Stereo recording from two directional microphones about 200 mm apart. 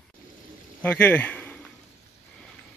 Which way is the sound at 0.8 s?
10° left (ahead or behind).